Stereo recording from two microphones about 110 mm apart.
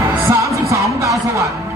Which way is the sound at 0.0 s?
25° right (ahead or behind).